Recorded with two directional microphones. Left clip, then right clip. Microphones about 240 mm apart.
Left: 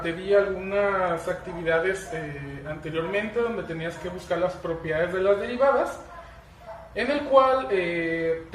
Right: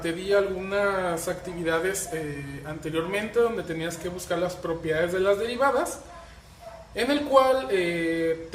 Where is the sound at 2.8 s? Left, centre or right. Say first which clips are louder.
Left 1 dB; right.